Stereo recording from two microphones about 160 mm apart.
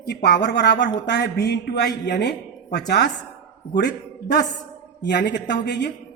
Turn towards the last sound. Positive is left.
turn(degrees=90)